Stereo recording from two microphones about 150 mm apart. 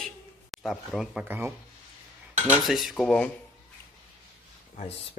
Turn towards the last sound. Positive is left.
turn(degrees=45)  # may be behind; listen again after turning